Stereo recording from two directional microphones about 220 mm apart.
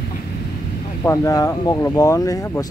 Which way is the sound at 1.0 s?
15° left (ahead or behind).